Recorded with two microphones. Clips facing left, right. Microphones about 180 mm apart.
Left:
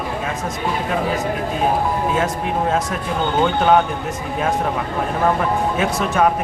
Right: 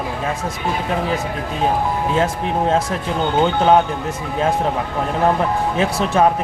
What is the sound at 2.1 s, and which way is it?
Speech, 25° right (ahead or behind).